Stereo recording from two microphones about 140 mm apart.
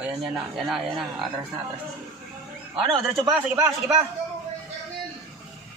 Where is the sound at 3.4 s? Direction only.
20° right (ahead or behind).